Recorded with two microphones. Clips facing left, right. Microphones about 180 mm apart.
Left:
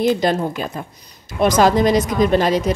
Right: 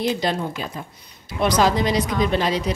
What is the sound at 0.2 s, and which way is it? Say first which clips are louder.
A woman's voice: left 5 dB; 50° left (ahead or behind).